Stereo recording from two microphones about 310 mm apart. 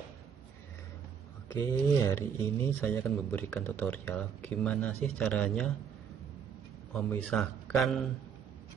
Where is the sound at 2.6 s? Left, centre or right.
Centre.